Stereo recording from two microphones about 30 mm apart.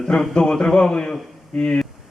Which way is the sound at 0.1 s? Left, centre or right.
Left.